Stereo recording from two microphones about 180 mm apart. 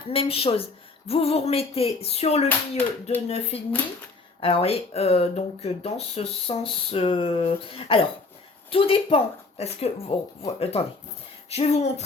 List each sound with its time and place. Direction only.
0.1 s speech: 30° left (ahead or behind)
2.5 s speech: 10° left (ahead or behind)
3.2 s speech: 35° left (ahead or behind)